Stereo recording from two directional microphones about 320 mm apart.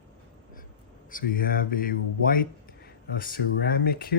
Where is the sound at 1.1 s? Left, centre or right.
Left.